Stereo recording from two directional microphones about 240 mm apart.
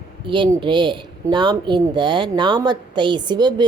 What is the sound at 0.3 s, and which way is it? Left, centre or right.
A woman's voice, centre.